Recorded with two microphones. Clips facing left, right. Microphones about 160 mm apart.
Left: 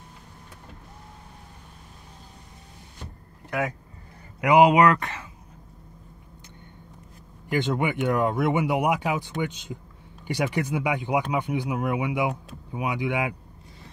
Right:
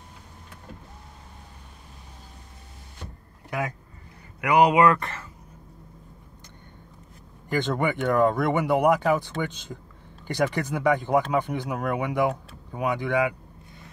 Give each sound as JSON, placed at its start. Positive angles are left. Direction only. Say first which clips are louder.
{"t": 3.4, "sound": "speech", "louder": "left 2 dB", "side_deg": 0}
{"t": 4.4, "sound": "speech", "louder": "left 2 dB", "side_deg": 15}
{"t": 7.7, "sound": "speech", "louder": "right 3 dB", "side_deg": 10}